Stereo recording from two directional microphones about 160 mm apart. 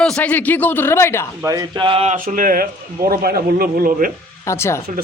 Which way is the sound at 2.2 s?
60° right (ahead or behind).